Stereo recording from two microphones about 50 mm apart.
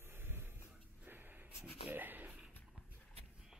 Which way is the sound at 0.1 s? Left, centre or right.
Right.